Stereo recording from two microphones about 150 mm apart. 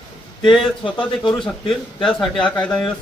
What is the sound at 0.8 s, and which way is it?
Speech, 35° left (ahead or behind).